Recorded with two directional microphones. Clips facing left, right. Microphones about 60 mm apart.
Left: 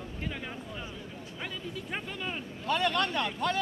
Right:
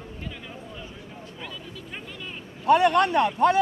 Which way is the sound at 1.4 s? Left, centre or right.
Left.